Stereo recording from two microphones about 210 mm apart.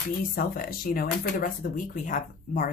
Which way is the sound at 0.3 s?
45° left (ahead or behind).